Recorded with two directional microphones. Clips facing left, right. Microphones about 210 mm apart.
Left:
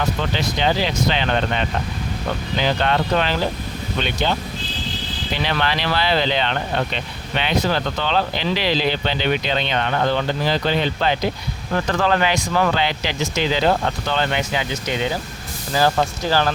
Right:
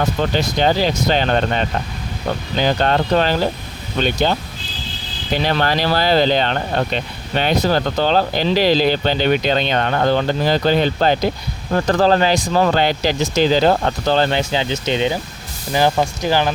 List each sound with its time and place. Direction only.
0.2 s speech: 45° right (ahead or behind)
12.7 s speech: 40° right (ahead or behind); by 16.5 s 15° right (ahead or behind)